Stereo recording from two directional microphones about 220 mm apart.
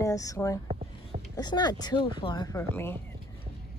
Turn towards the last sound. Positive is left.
turn(degrees=10)  # may be behind; listen again after turning